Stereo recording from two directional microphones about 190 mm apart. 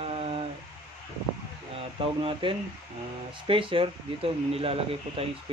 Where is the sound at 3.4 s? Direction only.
25° right (ahead or behind).